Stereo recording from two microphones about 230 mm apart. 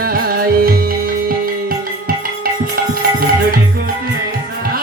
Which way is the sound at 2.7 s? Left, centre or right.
Right.